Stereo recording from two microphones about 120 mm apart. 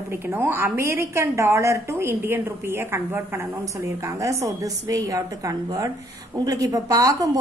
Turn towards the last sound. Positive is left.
turn(degrees=-30)  # may be behind; listen again after turning